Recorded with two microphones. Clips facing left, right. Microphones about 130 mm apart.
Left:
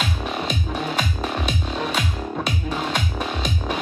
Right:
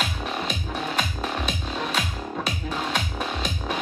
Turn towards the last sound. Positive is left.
turn(degrees=0)  # may be behind; listen again after turning